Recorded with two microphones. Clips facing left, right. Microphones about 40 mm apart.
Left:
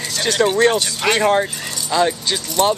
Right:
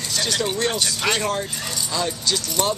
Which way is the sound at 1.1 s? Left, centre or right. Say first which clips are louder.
Left 8 dB; left.